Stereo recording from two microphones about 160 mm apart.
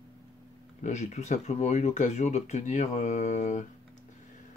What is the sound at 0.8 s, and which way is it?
Speech, 45° left (ahead or behind).